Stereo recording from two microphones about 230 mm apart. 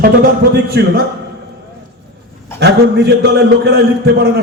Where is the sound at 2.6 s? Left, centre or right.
Right.